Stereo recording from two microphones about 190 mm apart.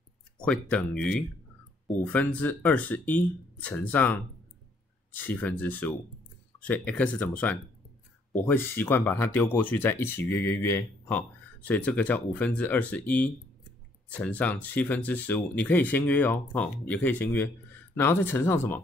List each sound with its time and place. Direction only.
0.4 s speech: 5° left (ahead or behind)